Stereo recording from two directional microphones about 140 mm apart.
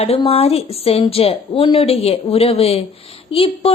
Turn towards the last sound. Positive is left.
turn(degrees=40)  # may be behind; listen again after turning